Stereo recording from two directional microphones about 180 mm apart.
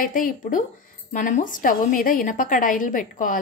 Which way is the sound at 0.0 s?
50° left (ahead or behind).